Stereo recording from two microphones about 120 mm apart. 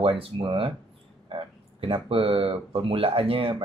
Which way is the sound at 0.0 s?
50° right (ahead or behind).